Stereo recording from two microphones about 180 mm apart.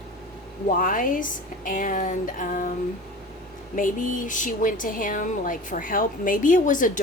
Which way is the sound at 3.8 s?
45° left (ahead or behind).